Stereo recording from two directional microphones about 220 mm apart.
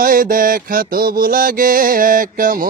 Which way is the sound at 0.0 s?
40° right (ahead or behind).